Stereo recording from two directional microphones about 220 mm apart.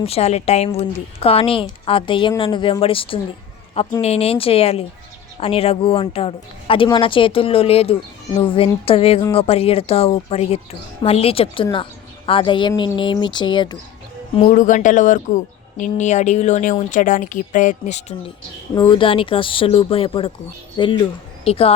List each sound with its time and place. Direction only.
0.0 s a woman's voice: 30° left (ahead or behind)
14.4 s speech: 35° left (ahead or behind)
18.7 s a woman's voice: 20° left (ahead or behind)